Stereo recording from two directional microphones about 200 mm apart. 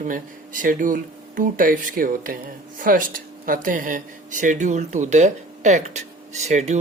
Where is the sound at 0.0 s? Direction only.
40° right (ahead or behind).